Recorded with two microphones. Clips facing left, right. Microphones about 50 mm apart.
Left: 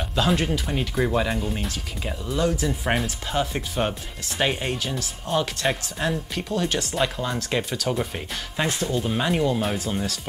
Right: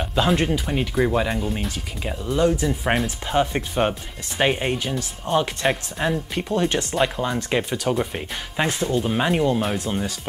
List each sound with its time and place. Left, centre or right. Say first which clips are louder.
0.0 s music: right 3 dB; centre
0.4 s speech: right 3 dB; centre
3.3 s speech: right 4 dB; centre